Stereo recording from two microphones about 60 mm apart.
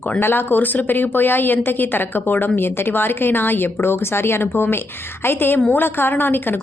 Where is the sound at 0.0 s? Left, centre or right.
Left.